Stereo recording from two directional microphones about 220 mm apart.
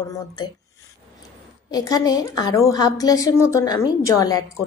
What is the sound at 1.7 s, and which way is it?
A woman's voice, 15° left (ahead or behind).